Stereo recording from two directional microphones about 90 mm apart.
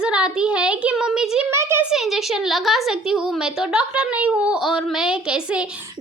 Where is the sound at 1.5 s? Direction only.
30° right (ahead or behind).